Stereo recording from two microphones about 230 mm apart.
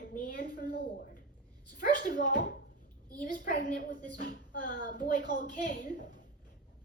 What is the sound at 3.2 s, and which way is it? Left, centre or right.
A woman's voice, left.